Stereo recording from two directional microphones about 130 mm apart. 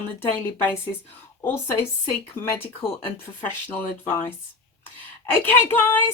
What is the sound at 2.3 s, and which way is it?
Speech, 20° left (ahead or behind).